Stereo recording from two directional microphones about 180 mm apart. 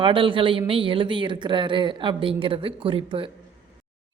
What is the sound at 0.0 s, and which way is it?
A woman's voice, 30° right (ahead or behind).